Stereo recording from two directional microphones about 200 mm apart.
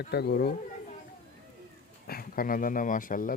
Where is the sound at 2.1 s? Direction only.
45° left (ahead or behind).